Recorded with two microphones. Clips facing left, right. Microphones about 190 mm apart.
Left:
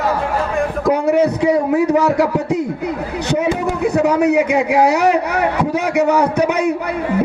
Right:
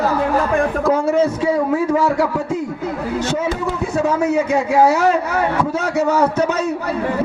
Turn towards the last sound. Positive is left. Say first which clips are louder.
# left 2 dB
turn(degrees=15)  # may be behind; listen again after turning